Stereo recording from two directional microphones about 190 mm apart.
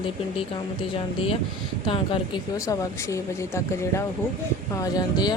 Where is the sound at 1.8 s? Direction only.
25° left (ahead or behind).